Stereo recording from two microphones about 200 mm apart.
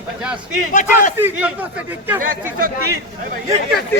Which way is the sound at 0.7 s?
40° left (ahead or behind).